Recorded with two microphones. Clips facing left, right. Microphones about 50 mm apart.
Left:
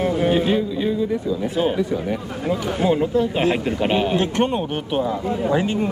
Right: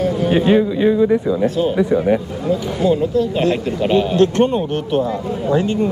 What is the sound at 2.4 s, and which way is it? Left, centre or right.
A man's voice, left.